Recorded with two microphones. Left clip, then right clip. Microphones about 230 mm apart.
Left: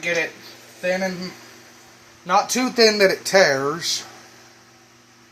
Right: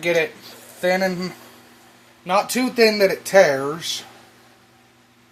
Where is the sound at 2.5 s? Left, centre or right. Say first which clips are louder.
Even; centre.